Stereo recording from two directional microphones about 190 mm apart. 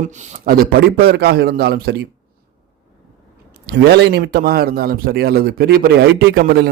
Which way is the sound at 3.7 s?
65° right (ahead or behind).